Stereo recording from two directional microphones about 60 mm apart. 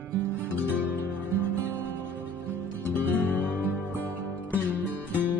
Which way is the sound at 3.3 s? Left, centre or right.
Left.